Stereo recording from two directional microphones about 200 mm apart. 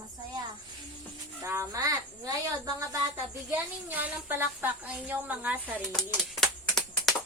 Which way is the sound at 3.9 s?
10° right (ahead or behind).